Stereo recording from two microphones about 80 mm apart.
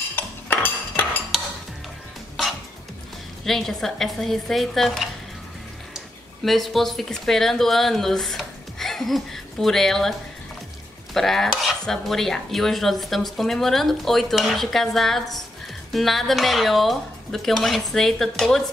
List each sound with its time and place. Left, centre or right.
0.1 s cutlery: left
3.4 s speech: centre
11.1 s speech: centre